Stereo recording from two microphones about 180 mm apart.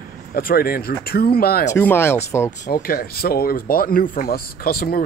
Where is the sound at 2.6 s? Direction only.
55° left (ahead or behind).